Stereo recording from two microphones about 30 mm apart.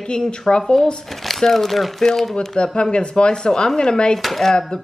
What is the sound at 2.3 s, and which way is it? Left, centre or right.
A woman's voice, left.